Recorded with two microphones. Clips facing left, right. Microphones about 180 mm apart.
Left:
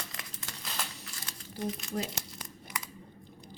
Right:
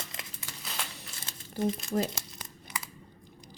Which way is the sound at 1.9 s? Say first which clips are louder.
Right 6 dB; 50° right (ahead or behind).